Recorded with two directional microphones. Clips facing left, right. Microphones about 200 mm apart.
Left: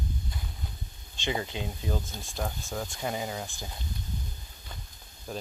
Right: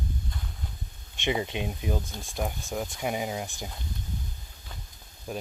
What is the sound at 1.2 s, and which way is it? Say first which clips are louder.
Speech: right 3 dB; 20° right (ahead or behind).